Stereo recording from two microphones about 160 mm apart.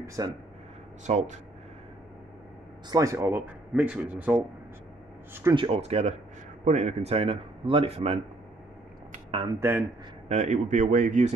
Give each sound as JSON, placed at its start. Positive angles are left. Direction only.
{"t": 0.0, "sound": "speech", "side_deg": -20}
{"t": 1.0, "sound": "speech", "side_deg": -50}
{"t": 2.9, "sound": "a man's voice", "side_deg": -20}
{"t": 5.5, "sound": "a man's voice", "side_deg": -35}
{"t": 9.6, "sound": "a man's voice", "side_deg": -15}
{"t": 10.2, "sound": "speech", "side_deg": -45}